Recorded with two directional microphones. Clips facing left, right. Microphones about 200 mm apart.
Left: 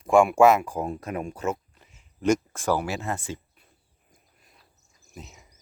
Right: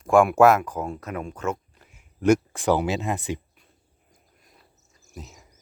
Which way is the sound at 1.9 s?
10° right (ahead or behind).